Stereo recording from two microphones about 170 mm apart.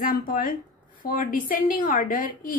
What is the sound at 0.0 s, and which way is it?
A woman's voice, 55° left (ahead or behind).